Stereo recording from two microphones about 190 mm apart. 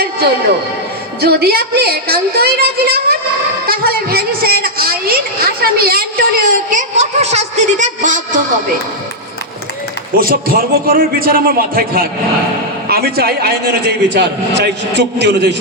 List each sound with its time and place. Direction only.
1.2 s a man's voice: 55° right (ahead or behind); by 8.2 s 40° right (ahead or behind)
10.2 s a man's voice: 50° right (ahead or behind)